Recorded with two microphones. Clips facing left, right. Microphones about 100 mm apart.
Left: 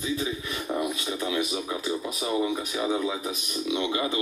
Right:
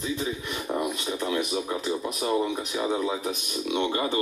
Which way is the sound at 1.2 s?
5° left (ahead or behind).